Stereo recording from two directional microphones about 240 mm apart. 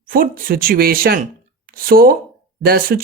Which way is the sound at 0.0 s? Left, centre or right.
Right.